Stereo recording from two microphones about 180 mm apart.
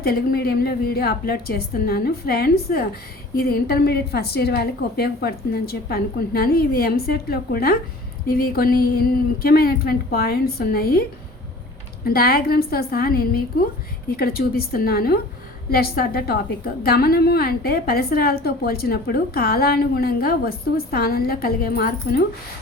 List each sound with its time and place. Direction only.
0.0 s a woman's voice: 55° left (ahead or behind)
12.0 s a woman's voice: 55° left (ahead or behind)